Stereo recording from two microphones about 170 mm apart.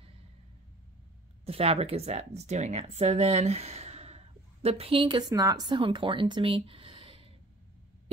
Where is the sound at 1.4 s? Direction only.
35° right (ahead or behind).